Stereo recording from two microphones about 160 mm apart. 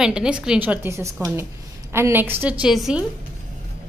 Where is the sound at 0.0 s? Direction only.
5° right (ahead or behind).